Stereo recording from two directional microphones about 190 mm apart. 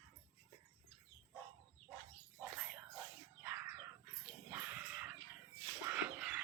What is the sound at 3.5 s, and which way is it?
Bird, 10° right (ahead or behind).